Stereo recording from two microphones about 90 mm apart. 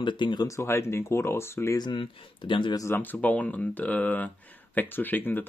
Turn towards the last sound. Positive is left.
turn(degrees=20)  # may be behind; listen again after turning